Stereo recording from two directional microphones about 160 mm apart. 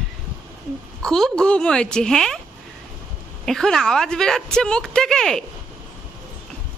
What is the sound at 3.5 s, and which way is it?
Speech, centre (ahead or behind).